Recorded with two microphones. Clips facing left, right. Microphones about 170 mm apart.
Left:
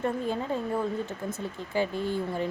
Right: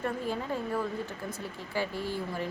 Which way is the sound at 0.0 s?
25° left (ahead or behind).